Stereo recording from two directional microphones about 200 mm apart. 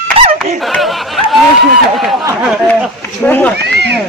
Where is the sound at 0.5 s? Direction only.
Centre (ahead or behind).